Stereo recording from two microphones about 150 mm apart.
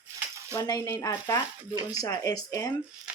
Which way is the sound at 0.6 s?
25° left (ahead or behind).